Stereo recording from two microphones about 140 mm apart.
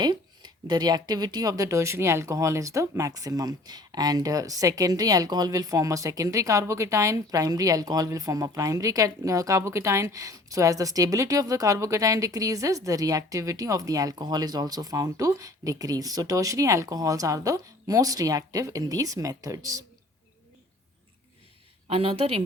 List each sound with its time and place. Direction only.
0.0 s speech: 30° right (ahead or behind)
21.8 s a woman's voice: 45° right (ahead or behind)